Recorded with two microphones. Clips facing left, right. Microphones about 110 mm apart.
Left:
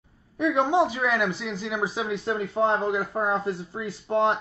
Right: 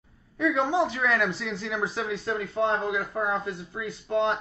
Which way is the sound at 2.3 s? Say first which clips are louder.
Left 2 dB; 30° left (ahead or behind).